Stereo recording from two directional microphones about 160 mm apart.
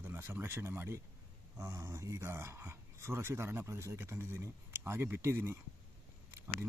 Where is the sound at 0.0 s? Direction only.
15° right (ahead or behind).